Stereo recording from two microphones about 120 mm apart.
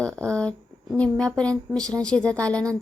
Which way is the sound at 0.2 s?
10° left (ahead or behind).